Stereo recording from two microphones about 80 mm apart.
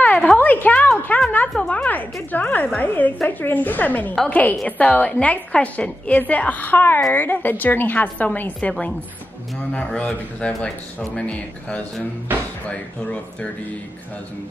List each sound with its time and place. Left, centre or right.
0.0 s a sound: centre
1.6 s a woman's voice: centre
9.9 s speech: centre